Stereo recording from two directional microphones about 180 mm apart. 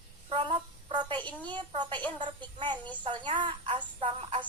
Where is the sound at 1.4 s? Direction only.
25° right (ahead or behind).